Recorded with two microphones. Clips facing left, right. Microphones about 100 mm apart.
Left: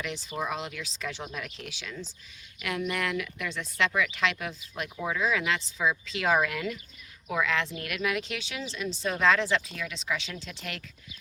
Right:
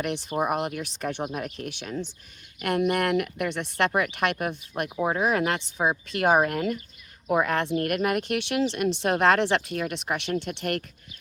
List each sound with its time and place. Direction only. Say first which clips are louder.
0.0 s speech: right 7 dB; 60° right (ahead or behind)
4.9 s speech: right 6 dB; 40° right (ahead or behind)
5.2 s speech: right 4 dB; 55° right (ahead or behind)
6.4 s speech: right 5 dB; 45° right (ahead or behind); by 10.8 s 65° right (ahead or behind)